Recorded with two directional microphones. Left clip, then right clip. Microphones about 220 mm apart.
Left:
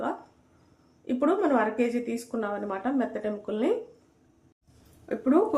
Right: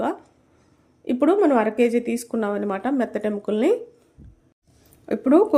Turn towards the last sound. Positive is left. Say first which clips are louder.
# right 7 dB
turn(degrees=-45)  # may be behind; listen again after turning